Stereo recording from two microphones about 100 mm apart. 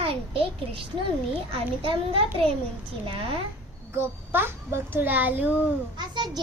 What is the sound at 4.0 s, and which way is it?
A child's voice, 20° right (ahead or behind).